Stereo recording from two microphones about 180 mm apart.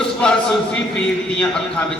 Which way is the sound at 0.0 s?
5° left (ahead or behind).